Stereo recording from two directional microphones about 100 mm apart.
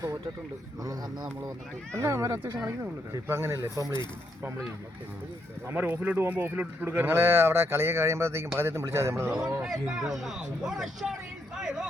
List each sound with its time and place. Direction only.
2.0 s speech: 25° right (ahead or behind)
5.6 s speech: 20° right (ahead or behind)
9.9 s speech: 5° right (ahead or behind)
11.5 s a sound: 5° right (ahead or behind)